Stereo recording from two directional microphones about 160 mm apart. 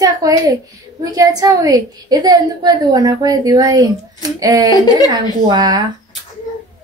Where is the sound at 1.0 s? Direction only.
25° right (ahead or behind).